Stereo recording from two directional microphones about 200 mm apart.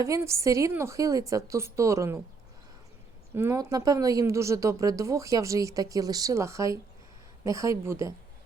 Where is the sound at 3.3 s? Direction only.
10° right (ahead or behind).